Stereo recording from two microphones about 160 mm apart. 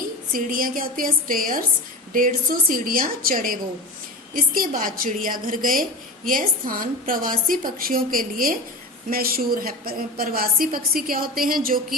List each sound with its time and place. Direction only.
0.3 s a woman's voice: 60° right (ahead or behind)